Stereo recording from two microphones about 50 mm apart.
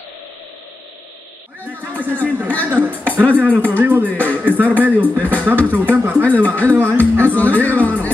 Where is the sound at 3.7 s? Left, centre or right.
Right.